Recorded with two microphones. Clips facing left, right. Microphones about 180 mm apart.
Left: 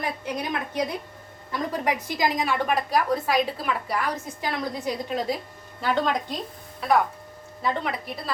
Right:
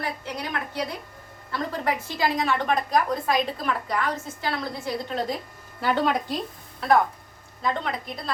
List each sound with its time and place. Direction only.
0.0 s a woman's voice: 20° left (ahead or behind)
5.8 s speech: 5° right (ahead or behind)